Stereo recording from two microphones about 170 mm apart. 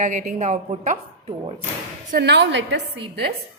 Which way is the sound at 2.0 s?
70° right (ahead or behind).